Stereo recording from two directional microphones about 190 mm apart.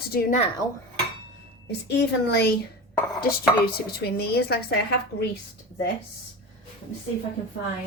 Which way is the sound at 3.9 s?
55° left (ahead or behind).